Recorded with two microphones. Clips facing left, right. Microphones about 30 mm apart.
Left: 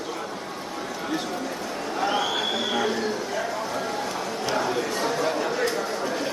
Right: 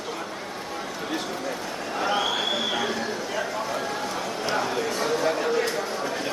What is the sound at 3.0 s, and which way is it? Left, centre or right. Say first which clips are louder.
Speech: left 1 dB; centre.